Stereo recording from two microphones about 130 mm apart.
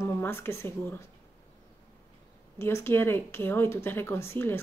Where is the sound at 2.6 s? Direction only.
20° left (ahead or behind).